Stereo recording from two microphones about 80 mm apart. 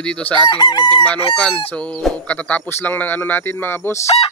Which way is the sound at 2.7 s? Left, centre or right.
Left.